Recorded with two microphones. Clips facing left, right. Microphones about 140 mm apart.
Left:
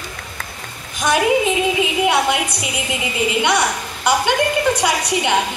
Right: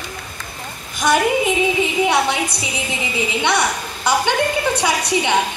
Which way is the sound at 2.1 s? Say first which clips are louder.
Left 1 dB; 10° left (ahead or behind).